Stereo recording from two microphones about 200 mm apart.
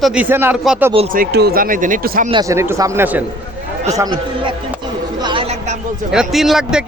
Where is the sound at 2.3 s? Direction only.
15° right (ahead or behind).